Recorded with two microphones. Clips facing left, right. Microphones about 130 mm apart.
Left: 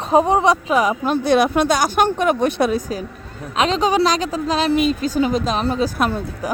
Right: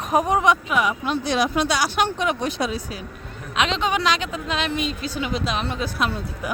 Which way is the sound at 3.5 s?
40° left (ahead or behind).